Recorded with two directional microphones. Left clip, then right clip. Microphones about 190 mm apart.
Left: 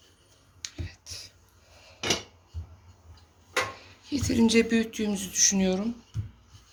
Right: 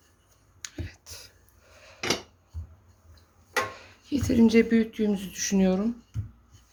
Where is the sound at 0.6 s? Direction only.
45° right (ahead or behind).